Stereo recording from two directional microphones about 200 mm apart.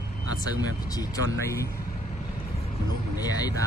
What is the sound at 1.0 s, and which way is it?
Speech, 20° left (ahead or behind).